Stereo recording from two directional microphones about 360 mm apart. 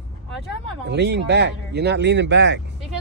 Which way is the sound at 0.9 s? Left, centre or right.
Right.